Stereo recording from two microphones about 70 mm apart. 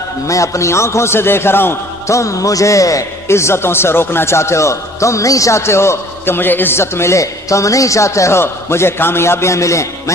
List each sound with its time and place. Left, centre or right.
0.3 s speech: left
2.0 s speech: left
3.2 s speech: left